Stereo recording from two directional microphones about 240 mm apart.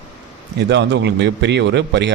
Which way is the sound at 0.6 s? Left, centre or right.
Right.